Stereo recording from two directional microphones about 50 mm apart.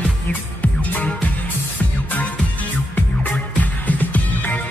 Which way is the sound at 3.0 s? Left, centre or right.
Left.